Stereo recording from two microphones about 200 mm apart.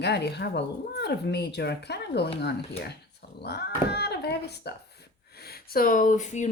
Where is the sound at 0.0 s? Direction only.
55° left (ahead or behind).